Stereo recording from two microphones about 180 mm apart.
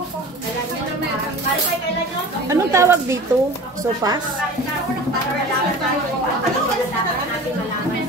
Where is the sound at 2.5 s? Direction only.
15° right (ahead or behind).